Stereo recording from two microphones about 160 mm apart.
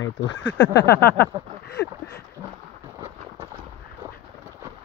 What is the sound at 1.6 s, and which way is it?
Speech, 90° left.